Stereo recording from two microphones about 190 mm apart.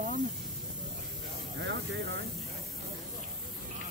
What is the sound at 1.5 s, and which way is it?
Speech, 70° right (ahead or behind).